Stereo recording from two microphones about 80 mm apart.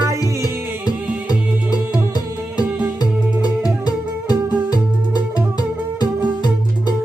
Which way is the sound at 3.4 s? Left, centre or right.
Left.